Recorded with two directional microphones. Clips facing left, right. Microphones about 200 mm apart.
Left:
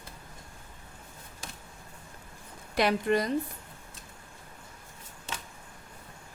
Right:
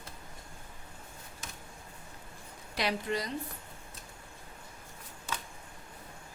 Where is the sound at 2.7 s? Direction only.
55° left (ahead or behind).